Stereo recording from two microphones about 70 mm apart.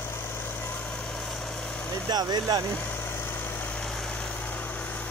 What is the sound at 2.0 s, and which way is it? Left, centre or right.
Speech, right.